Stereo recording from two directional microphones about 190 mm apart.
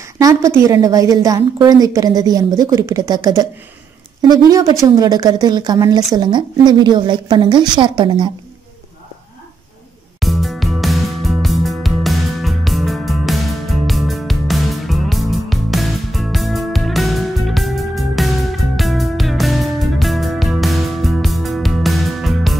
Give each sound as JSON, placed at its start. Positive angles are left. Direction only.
{"t": 0.2, "sound": "a woman's voice", "side_deg": -15}
{"t": 10.2, "sound": "music", "side_deg": 0}